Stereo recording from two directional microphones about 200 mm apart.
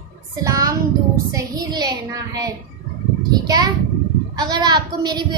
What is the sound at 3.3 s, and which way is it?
A child's voice, 20° right (ahead or behind).